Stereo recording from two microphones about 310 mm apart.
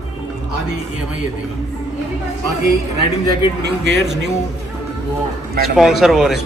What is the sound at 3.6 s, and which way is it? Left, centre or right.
Speech, right.